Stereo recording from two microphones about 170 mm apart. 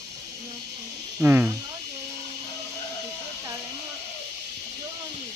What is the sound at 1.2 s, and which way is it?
Speech, 10° right (ahead or behind).